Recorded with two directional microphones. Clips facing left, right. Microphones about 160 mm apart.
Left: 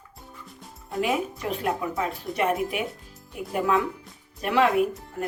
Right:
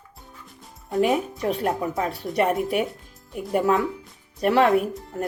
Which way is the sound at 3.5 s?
40° right (ahead or behind).